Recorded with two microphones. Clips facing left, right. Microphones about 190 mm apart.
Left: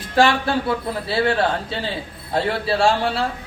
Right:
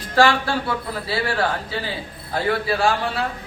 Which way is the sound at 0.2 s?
20° left (ahead or behind).